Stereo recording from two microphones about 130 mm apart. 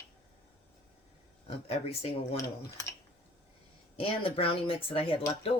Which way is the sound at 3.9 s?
45° left (ahead or behind).